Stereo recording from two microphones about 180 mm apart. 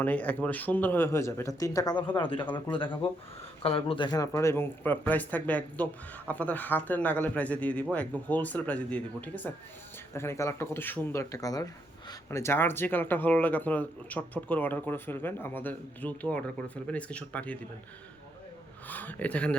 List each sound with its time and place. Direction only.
0.0 s speech: 10° left (ahead or behind)
18.9 s speech: 10° left (ahead or behind)